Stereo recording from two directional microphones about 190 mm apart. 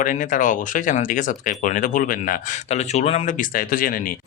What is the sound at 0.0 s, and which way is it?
Speech, 45° left (ahead or behind).